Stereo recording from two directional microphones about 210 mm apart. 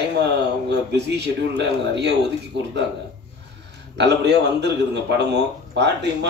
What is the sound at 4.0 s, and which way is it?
A man's voice, 55° right (ahead or behind).